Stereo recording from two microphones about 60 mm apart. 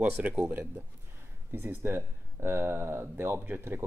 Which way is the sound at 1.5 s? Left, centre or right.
Right.